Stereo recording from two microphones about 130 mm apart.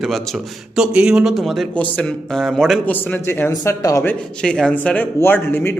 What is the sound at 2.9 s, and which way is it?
Speech, 15° left (ahead or behind).